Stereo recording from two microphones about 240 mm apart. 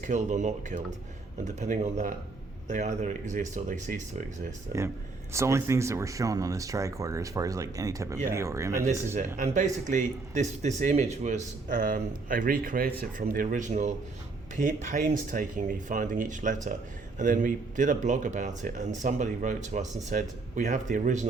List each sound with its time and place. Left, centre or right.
0.0 s a man's voice: right
5.3 s speech: centre
9.1 s a man's voice: right